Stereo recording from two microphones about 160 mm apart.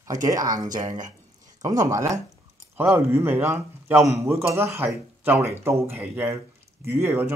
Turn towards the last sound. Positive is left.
turn(degrees=-15)  # may be behind; listen again after turning